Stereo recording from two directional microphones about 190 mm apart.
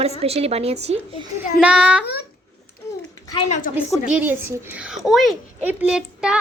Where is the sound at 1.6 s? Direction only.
5° right (ahead or behind).